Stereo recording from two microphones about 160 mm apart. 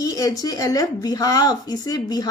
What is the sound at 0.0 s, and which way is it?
A woman's voice, 20° left (ahead or behind).